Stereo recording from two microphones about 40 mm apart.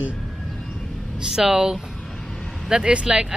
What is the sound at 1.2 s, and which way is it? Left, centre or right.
Speech, centre.